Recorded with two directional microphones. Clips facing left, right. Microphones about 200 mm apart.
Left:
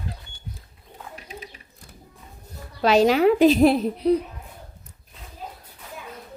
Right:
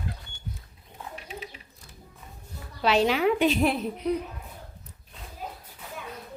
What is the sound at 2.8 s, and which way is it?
A woman's voice, 40° left (ahead or behind).